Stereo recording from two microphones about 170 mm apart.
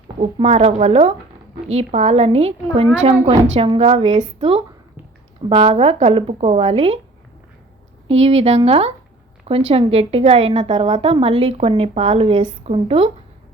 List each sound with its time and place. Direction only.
0.2 s a woman's voice: 40° right (ahead or behind)
8.0 s a woman's voice: 35° right (ahead or behind)